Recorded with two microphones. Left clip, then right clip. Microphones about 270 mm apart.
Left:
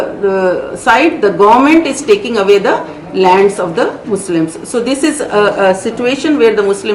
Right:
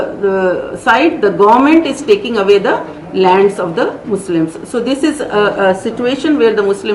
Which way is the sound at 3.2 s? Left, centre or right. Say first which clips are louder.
Left 2 dB; centre.